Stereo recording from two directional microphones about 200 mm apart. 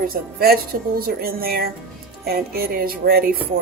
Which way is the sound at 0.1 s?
50° right (ahead or behind).